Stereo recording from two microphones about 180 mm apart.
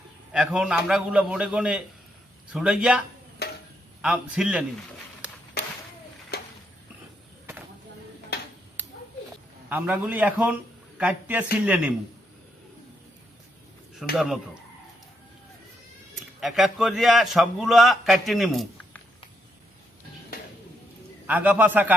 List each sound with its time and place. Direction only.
0.3 s a man's voice: 5° right (ahead or behind)
3.4 s a sound: 65° left (ahead or behind)
4.0 s a man's voice: 5° right (ahead or behind)
6.3 s a sound: 60° left (ahead or behind)
9.6 s a man's voice: 10° right (ahead or behind)
14.2 s a man's voice: 5° right (ahead or behind)
16.4 s a man's voice: centre (ahead or behind)
21.2 s a man's voice: 10° right (ahead or behind)